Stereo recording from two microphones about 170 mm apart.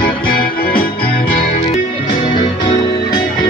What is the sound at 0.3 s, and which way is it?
Music, 60° left (ahead or behind).